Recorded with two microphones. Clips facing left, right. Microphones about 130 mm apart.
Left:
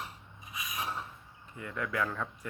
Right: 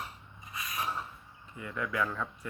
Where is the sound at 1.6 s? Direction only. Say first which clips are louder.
Right 1 dB; 45° left (ahead or behind).